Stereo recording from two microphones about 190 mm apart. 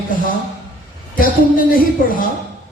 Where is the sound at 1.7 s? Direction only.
45° left (ahead or behind).